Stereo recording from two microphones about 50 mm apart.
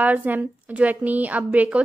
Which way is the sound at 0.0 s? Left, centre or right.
Right.